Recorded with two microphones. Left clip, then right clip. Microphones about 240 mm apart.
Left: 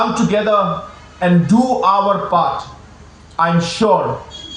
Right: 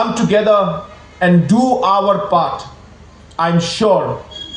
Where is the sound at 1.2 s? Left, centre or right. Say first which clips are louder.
Right 1 dB; right.